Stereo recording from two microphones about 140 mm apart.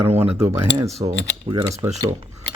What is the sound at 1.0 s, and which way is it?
Mechanisms, 35° right (ahead or behind).